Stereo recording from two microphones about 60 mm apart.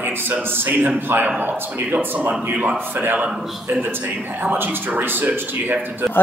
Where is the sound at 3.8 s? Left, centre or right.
Right.